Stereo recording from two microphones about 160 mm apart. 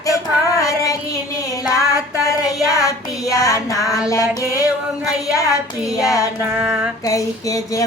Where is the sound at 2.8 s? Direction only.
20° left (ahead or behind).